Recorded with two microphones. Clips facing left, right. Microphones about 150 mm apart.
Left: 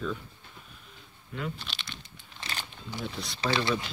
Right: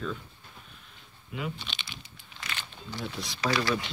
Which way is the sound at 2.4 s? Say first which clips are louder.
Left 1 dB; 35° left (ahead or behind).